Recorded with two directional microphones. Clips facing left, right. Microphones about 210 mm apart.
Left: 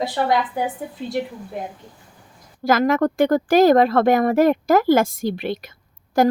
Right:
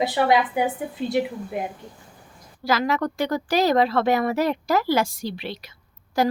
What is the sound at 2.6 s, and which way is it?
Speech, 50° left (ahead or behind).